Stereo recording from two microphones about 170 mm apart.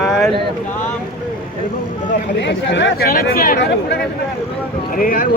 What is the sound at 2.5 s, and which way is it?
Speech, 90° left.